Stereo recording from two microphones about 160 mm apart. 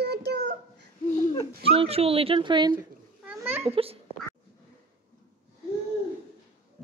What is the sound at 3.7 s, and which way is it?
Speech, 35° right (ahead or behind).